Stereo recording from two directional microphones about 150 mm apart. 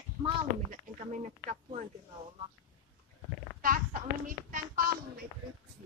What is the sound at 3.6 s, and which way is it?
A child's voice, 70° right (ahead or behind).